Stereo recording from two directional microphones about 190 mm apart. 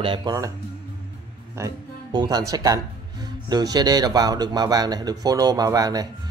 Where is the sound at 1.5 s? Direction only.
20° right (ahead or behind).